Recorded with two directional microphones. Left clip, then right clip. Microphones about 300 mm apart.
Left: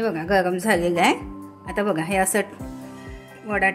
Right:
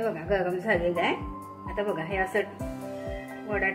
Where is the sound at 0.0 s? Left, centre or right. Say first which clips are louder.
Left 6 dB; left.